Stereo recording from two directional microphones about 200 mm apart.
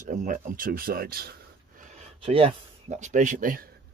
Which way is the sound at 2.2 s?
30° right (ahead or behind).